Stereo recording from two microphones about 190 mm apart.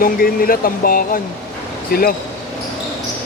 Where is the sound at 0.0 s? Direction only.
50° left (ahead or behind).